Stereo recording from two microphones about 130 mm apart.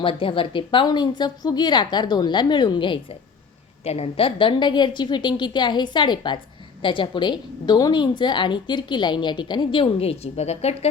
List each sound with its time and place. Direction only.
0.0 s a woman's voice: 40° left (ahead or behind)
3.8 s a woman's voice: 50° left (ahead or behind)